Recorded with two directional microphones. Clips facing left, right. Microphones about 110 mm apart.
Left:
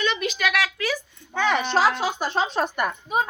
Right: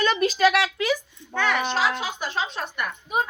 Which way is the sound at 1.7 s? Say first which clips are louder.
Left 4 dB; 40° left (ahead or behind).